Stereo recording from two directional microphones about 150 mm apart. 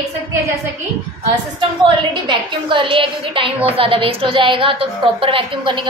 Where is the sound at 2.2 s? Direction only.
35° right (ahead or behind).